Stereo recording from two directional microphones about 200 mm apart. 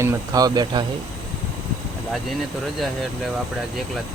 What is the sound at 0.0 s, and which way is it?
Speech, 15° right (ahead or behind).